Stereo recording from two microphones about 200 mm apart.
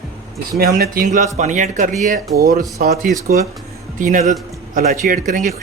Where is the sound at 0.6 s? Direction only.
50° right (ahead or behind).